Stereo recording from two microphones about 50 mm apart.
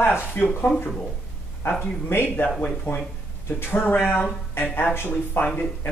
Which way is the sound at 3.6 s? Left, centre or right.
Left.